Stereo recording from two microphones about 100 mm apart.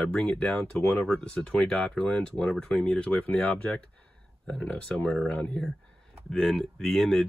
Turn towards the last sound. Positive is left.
turn(degrees=0)  # may be behind; listen again after turning